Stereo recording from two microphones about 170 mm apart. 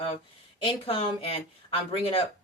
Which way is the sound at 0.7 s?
35° left (ahead or behind).